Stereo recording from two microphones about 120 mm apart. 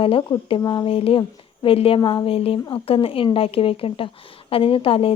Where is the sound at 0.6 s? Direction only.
35° left (ahead or behind).